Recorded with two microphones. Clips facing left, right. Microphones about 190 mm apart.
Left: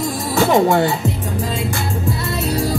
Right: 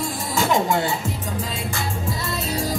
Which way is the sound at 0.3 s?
65° left (ahead or behind).